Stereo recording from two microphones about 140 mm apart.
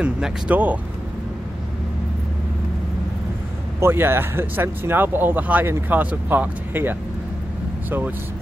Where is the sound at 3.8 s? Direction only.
15° right (ahead or behind).